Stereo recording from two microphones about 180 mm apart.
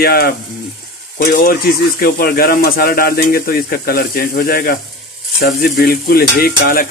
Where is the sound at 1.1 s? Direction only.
55° left (ahead or behind).